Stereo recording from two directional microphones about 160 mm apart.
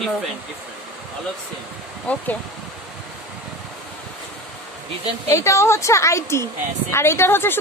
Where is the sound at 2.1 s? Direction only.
10° left (ahead or behind).